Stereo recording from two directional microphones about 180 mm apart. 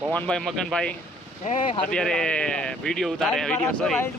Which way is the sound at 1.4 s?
40° left (ahead or behind).